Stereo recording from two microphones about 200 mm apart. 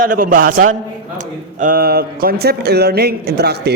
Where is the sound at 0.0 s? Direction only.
45° right (ahead or behind).